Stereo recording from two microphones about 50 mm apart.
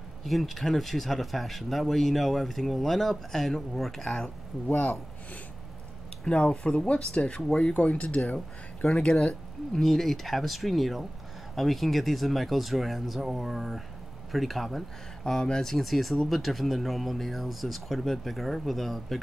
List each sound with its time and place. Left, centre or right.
0.2 s speech: centre
6.2 s speech: centre
9.8 s speech: centre